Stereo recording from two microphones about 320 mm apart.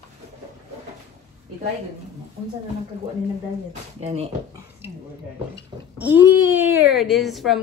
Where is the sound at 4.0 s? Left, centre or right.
Centre.